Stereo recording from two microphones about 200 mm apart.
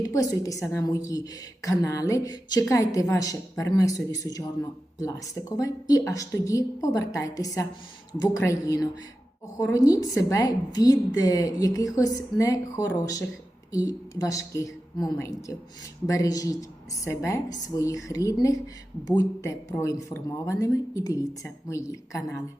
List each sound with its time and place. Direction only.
0.0 s a woman's voice: 15° left (ahead or behind)